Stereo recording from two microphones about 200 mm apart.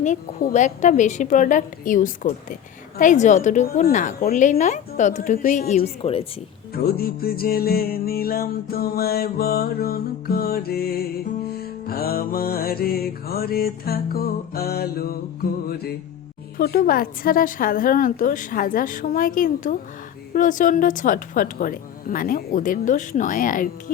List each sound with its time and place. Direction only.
0.0 s a woman's voice: 40° left (ahead or behind)
6.7 s music: 50° left (ahead or behind)
20.3 s a woman's voice: 40° left (ahead or behind)